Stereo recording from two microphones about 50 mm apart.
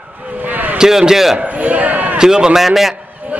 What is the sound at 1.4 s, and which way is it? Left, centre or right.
Speech, right.